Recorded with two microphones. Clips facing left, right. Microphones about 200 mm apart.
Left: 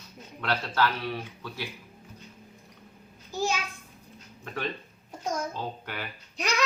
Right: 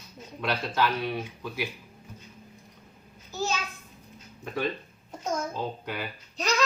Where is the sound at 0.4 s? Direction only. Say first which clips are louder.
Even; 15° right (ahead or behind).